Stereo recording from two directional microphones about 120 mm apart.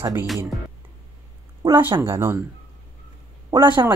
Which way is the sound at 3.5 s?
40° right (ahead or behind).